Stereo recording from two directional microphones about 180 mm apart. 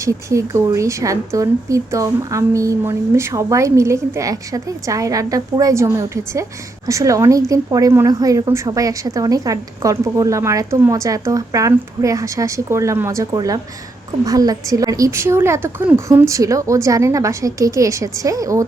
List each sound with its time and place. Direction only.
0.0 s a woman's voice: 15° right (ahead or behind)